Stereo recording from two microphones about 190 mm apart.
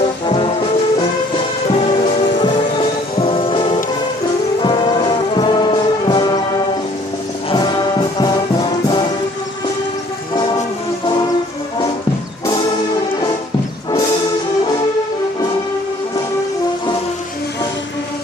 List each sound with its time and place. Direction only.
0.3 s music: 30° left (ahead or behind)
3.2 s music: 30° left (ahead or behind)
7.5 s music: 25° left (ahead or behind)